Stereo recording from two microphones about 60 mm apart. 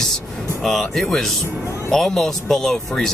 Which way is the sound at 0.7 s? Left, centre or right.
Centre.